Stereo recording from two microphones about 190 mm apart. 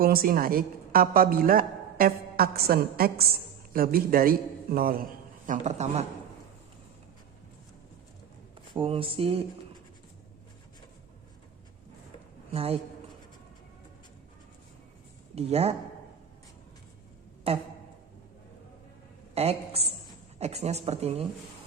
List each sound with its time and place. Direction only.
0.0 s a woman's voice: 50° right (ahead or behind)
5.5 s speech: 40° right (ahead or behind)
8.7 s speech: 30° right (ahead or behind)
12.5 s speech: 30° right (ahead or behind)
15.4 s speech: 35° right (ahead or behind)
17.5 s speech: 30° right (ahead or behind)
19.3 s a woman's voice: 35° right (ahead or behind)